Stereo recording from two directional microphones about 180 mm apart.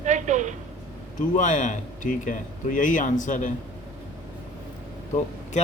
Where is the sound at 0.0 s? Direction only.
40° right (ahead or behind).